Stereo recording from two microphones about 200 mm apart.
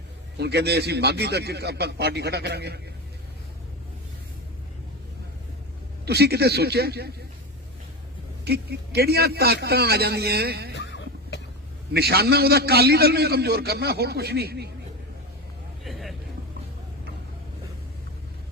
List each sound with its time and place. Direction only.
0.3 s a man's voice: 55° right (ahead or behind)
6.1 s a man's voice: 55° right (ahead or behind)
8.4 s a man's voice: 55° right (ahead or behind)
10.8 s a sound: 60° left (ahead or behind)
11.9 s a man's voice: 55° right (ahead or behind)
15.8 s vehicle: centre (ahead or behind)